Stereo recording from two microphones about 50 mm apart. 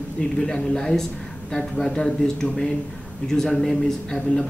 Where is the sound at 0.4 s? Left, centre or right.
Centre.